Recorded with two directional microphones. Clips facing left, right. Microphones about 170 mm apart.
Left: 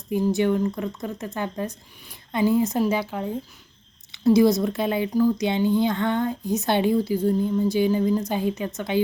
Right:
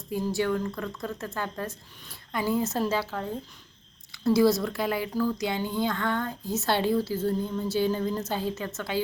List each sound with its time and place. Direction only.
0.1 s speech: 20° left (ahead or behind)
4.3 s speech: 20° left (ahead or behind)